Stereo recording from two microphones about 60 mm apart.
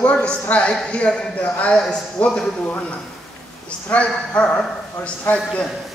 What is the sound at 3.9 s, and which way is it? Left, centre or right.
Speech, centre.